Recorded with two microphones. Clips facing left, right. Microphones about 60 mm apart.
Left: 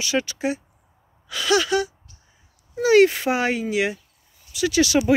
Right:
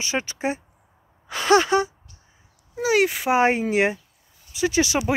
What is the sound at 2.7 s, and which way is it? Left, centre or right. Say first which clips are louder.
Speech: left 5 dB; centre.